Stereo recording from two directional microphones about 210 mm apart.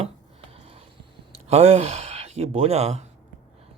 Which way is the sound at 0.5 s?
30° right (ahead or behind).